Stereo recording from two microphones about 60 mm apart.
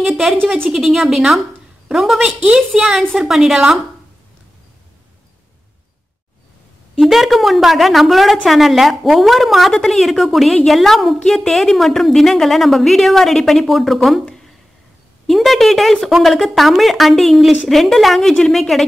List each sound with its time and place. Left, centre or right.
0.0 s a woman's voice: centre
2.1 s a woman's voice: centre
7.0 s a woman's voice: centre
15.2 s a woman's voice: centre